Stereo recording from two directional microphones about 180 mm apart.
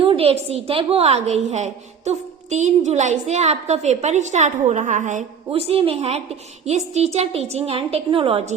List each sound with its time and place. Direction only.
0.0 s a woman's voice: 30° right (ahead or behind)
5.5 s a woman's voice: 30° right (ahead or behind)